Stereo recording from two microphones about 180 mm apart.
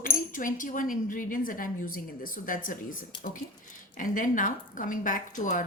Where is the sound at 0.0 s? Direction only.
50° left (ahead or behind).